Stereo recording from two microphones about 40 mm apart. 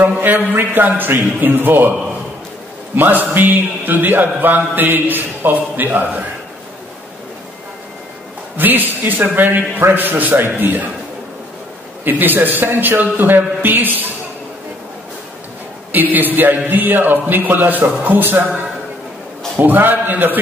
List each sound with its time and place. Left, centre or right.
0.0 s speech: right
3.0 s speech: right
8.5 s speech: right
12.0 s speech: right
15.9 s a man's voice: right
19.5 s speech: right